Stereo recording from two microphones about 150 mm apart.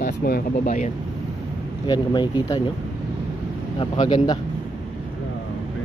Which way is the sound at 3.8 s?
30° left (ahead or behind).